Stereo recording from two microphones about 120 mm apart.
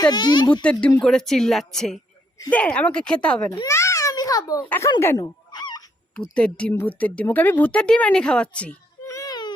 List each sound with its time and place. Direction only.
0.0 s speech: 35° left (ahead or behind)
0.6 s speech: 10° left (ahead or behind)
3.7 s a sound: 25° left (ahead or behind)
5.1 s fowl: 35° left (ahead or behind)
6.1 s speech: 10° left (ahead or behind)
9.0 s baby cry: 30° left (ahead or behind)